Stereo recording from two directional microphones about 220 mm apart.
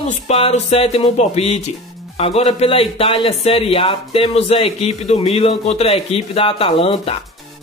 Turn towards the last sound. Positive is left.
turn(degrees=25)  # may be behind; listen again after turning